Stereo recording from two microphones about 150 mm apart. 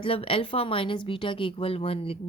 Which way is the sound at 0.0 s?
40° left (ahead or behind).